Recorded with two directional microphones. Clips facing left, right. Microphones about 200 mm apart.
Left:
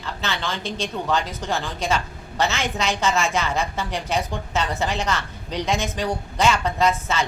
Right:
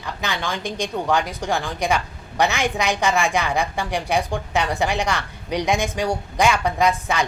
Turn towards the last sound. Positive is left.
turn(degrees=-15)  # may be behind; listen again after turning